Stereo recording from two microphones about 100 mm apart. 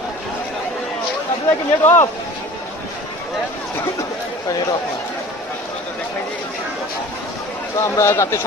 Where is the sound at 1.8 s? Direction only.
25° left (ahead or behind).